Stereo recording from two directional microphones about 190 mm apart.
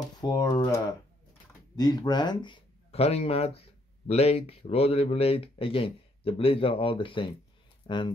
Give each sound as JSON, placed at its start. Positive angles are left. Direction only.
{"t": 0.2, "sound": "speech", "side_deg": 20}
{"t": 1.8, "sound": "speech", "side_deg": 20}